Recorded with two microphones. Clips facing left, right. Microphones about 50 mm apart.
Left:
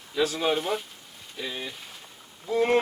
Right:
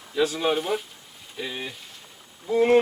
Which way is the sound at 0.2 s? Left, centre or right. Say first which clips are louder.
Right 2 dB; centre.